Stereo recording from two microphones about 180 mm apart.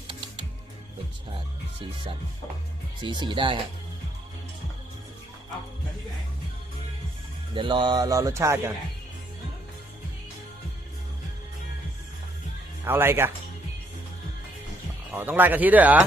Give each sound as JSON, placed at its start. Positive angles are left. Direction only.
{"t": 3.0, "sound": "speech", "side_deg": -25}
{"t": 7.5, "sound": "speech", "side_deg": -25}
{"t": 12.8, "sound": "speech", "side_deg": -10}
{"t": 15.1, "sound": "speech", "side_deg": -10}